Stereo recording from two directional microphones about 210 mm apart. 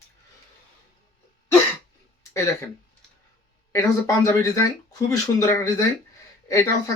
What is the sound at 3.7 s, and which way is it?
Speech, 15° left (ahead or behind).